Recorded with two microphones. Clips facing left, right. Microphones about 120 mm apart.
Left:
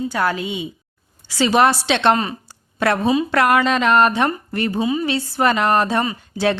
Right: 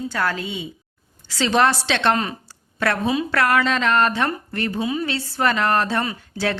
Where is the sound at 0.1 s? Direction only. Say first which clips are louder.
Left 3 dB; 15° left (ahead or behind).